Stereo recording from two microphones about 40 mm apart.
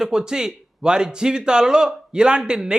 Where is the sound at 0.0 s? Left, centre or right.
Centre.